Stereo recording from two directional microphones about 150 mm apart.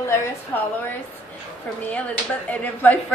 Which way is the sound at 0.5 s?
10° left (ahead or behind).